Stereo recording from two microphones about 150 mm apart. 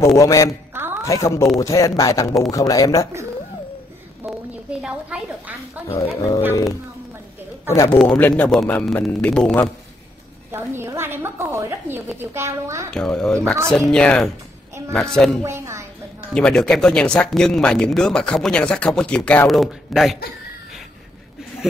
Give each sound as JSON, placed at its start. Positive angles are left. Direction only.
{"t": 0.0, "sound": "speech", "side_deg": 20}
{"t": 5.1, "sound": "a woman's voice", "side_deg": -5}
{"t": 5.9, "sound": "a man's voice", "side_deg": 20}
{"t": 10.5, "sound": "a woman's voice", "side_deg": -15}
{"t": 12.9, "sound": "speech", "side_deg": 5}
{"t": 15.4, "sound": "a woman's voice", "side_deg": -15}
{"t": 16.3, "sound": "speech", "side_deg": 5}